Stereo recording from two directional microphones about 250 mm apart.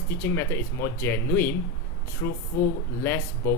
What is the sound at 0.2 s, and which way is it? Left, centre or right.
Speech, centre.